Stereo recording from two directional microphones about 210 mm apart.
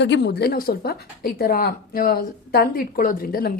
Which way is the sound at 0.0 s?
55° left (ahead or behind).